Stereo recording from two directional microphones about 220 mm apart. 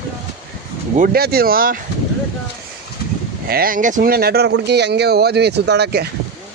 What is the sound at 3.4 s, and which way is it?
Speech, 40° right (ahead or behind).